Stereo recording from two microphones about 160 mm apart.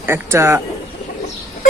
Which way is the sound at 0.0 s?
15° right (ahead or behind).